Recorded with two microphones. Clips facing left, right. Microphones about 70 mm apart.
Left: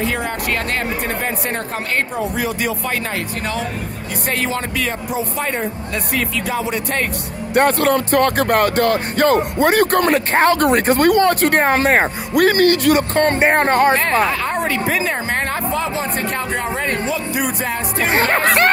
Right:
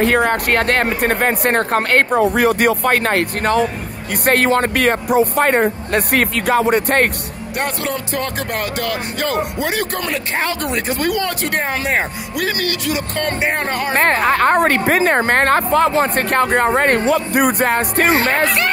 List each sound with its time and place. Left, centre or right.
0.0 s speech: right
7.5 s speech: left
14.2 s speech: right
18.1 s speech: left